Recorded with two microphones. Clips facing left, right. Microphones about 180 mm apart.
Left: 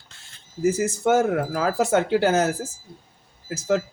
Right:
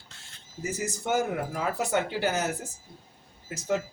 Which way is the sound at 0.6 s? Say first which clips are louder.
Left 11 dB; 85° left.